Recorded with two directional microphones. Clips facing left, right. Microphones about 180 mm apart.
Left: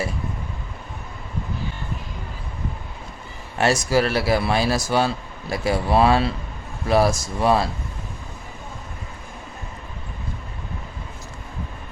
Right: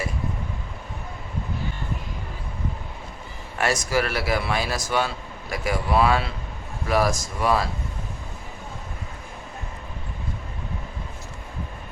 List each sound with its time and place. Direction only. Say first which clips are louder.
3.6 s a man's voice: left 4 dB; 30° left (ahead or behind)